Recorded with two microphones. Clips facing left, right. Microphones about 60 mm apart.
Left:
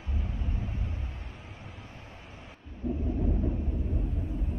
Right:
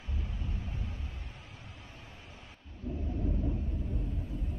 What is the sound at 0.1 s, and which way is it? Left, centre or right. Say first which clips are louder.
Vehicle: left 4 dB; left.